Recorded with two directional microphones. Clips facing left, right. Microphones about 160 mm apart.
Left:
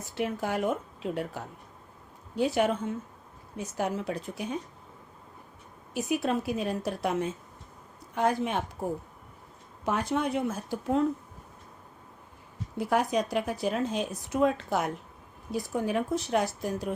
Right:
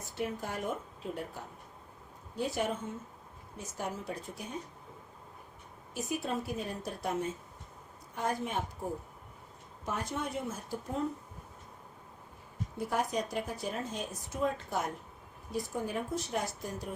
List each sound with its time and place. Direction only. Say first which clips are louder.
0.2 s a woman's voice: left 7 dB; 80° left
3.6 s a woman's voice: left 8 dB; 75° left (ahead or behind)
5.9 s a woman's voice: left 7 dB; 80° left
9.8 s a woman's voice: left 8 dB; 85° left
12.7 s a woman's voice: left 6 dB; 80° left
15.7 s a woman's voice: left 8 dB; 75° left (ahead or behind)